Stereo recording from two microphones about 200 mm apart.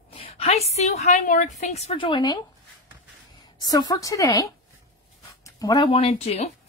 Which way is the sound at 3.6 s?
20° left (ahead or behind).